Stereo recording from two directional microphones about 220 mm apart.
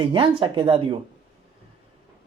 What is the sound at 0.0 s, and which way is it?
Speech, 20° right (ahead or behind).